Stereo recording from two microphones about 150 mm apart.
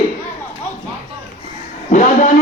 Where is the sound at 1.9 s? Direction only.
55° left (ahead or behind).